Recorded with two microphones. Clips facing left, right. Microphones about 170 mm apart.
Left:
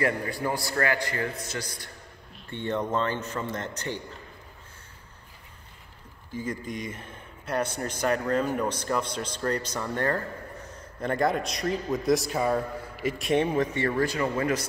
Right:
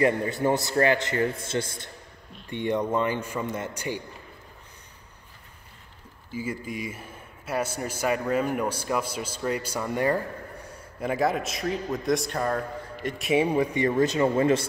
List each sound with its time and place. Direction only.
0.0 s a man's voice: 20° right (ahead or behind)
2.5 s a man's voice: 15° right (ahead or behind)
6.3 s a man's voice: 5° right (ahead or behind)
13.2 s a man's voice: 5° right (ahead or behind); by 14.7 s 25° right (ahead or behind)